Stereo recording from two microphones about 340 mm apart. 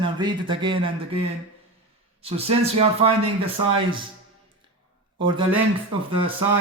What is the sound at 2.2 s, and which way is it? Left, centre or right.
Speech, centre.